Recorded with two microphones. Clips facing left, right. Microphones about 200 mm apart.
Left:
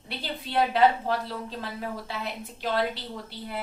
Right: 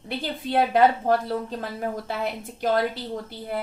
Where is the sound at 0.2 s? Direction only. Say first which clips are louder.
Right 3 dB; 45° right (ahead or behind).